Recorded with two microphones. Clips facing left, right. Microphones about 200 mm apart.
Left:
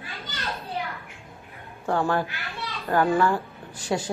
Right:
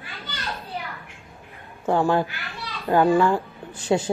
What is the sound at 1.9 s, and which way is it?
A woman's voice, 15° right (ahead or behind).